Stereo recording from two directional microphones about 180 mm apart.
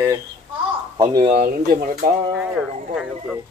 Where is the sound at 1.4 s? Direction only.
55° right (ahead or behind).